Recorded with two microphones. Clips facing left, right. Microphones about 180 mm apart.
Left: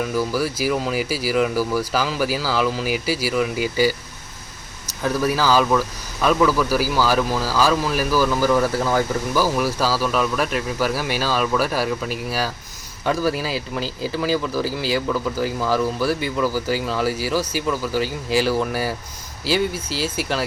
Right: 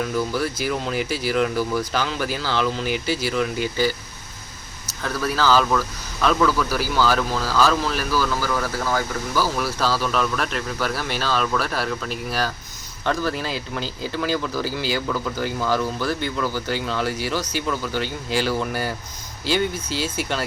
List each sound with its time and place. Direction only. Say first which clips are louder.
0.0 s speech: left 2 dB; 5° left (ahead or behind)
5.0 s speech: left 2 dB; 15° left (ahead or behind)